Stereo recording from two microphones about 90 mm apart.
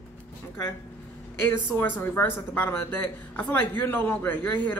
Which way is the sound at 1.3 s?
25° left (ahead or behind).